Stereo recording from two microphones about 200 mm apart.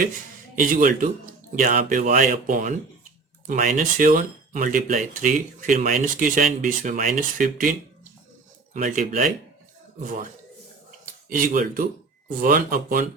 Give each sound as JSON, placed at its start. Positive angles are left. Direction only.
{"t": 0.6, "sound": "speech", "side_deg": -40}
{"t": 11.0, "sound": "speech", "side_deg": -45}